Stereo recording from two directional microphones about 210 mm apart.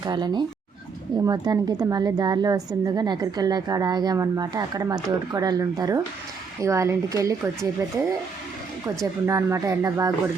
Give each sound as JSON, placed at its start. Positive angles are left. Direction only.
{"t": 0.0, "sound": "a woman's voice", "side_deg": -20}
{"t": 9.2, "sound": "a woman's voice", "side_deg": -15}